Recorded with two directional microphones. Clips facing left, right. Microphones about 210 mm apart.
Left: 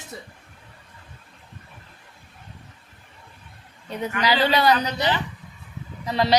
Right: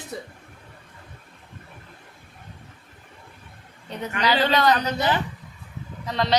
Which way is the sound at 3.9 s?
10° left (ahead or behind).